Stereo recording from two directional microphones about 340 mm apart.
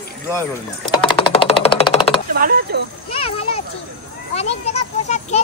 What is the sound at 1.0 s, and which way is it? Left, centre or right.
Speech, centre.